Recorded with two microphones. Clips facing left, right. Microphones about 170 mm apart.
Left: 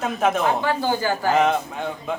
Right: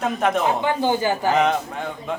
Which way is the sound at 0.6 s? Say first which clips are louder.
Right 2 dB; 20° right (ahead or behind).